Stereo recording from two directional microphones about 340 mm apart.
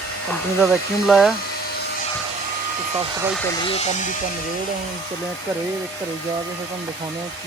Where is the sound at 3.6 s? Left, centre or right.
Centre.